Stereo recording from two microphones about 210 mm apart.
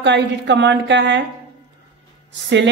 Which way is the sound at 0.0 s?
55° right (ahead or behind).